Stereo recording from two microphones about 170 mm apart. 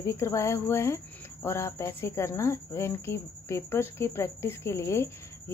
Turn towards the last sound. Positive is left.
turn(degrees=15)  # may be behind; listen again after turning